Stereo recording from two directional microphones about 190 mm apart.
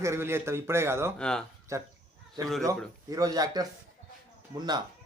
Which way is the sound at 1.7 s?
15° right (ahead or behind).